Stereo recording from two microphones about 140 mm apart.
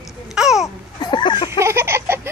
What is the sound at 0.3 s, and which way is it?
Babbling, 5° right (ahead or behind).